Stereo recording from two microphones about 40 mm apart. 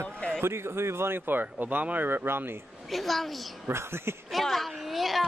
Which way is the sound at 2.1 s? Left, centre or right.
Right.